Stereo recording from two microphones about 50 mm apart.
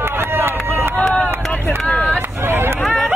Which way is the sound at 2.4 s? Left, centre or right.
Right.